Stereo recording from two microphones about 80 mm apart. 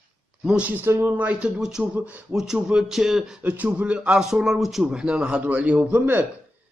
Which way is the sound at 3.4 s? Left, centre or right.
Centre.